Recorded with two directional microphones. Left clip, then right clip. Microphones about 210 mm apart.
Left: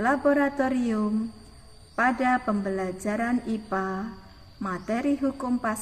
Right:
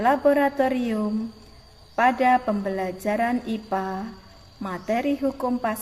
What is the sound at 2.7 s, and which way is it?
A woman's voice, centre (ahead or behind).